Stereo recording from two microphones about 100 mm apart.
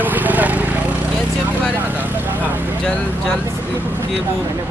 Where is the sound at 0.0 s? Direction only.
15° right (ahead or behind).